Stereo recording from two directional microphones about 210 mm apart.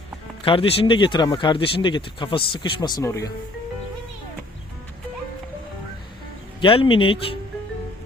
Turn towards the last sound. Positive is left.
turn(degrees=25)  # may be behind; listen again after turning